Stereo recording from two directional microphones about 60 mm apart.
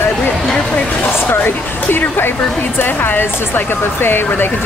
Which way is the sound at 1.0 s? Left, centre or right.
Left.